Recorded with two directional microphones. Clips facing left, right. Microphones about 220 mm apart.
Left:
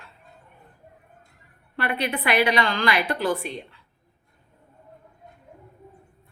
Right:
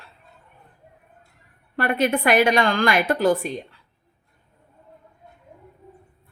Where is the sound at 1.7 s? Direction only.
45° right (ahead or behind).